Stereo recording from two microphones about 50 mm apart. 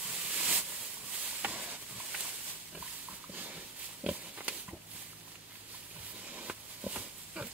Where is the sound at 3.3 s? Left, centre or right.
Right.